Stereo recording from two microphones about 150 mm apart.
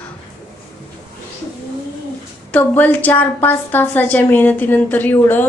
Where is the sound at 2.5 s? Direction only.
10° left (ahead or behind).